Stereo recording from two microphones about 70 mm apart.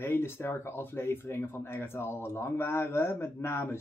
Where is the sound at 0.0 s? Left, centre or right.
Left.